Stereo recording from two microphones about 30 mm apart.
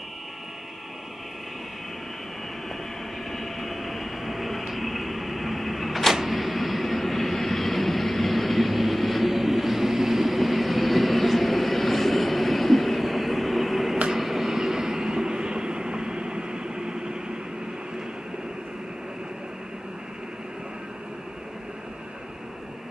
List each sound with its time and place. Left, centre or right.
3.3 s train: centre; by 17.2 s right